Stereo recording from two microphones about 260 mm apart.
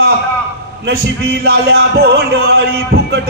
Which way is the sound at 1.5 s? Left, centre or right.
Right.